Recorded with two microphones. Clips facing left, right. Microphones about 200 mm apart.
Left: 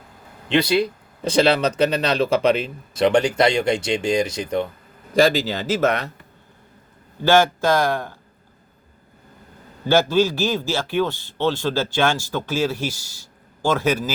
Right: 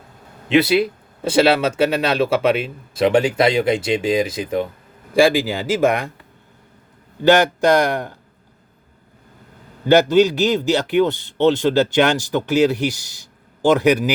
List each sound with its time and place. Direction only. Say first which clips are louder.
0.4 s speech: right 3 dB; 5° right (ahead or behind)
7.8 s speech: right 2 dB; 20° right (ahead or behind)
9.9 s speech: right 4 dB; 20° right (ahead or behind)